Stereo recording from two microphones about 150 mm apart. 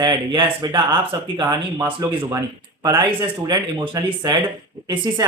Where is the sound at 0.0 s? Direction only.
30° right (ahead or behind).